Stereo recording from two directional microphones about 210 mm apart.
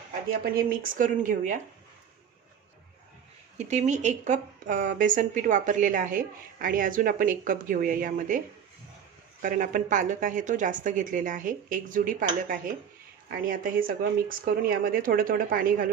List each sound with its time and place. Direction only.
0.3 s a woman's voice: 45° right (ahead or behind)
3.6 s a woman's voice: 35° right (ahead or behind)
9.4 s a woman's voice: 40° right (ahead or behind)
13.2 s speech: 45° right (ahead or behind)